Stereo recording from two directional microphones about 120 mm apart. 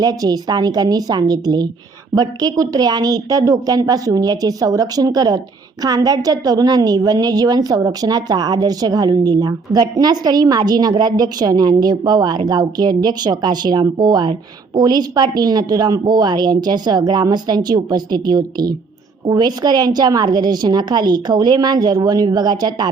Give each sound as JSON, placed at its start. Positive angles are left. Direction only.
{"t": 0.0, "sound": "a woman's voice", "side_deg": -35}